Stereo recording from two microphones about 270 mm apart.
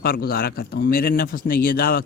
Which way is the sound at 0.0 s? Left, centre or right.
Left.